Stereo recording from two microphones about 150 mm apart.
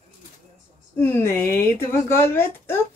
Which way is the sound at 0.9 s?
15° left (ahead or behind).